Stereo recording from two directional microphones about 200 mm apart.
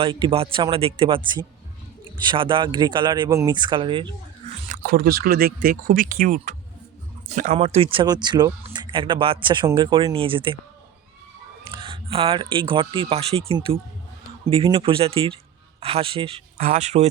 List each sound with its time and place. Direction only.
0.0 s speech: 25° right (ahead or behind)
4.7 s speech: 45° right (ahead or behind); by 10.6 s 25° right (ahead or behind)
11.7 s speech: 25° right (ahead or behind)